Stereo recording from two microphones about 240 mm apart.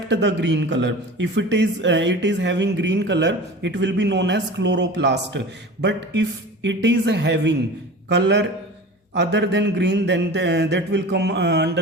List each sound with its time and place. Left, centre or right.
0.1 s a man's voice: right
6.7 s a man's voice: right